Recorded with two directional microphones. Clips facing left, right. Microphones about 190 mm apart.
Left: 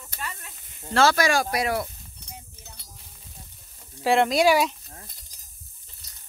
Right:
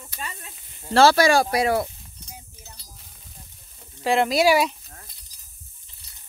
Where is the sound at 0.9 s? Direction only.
30° right (ahead or behind).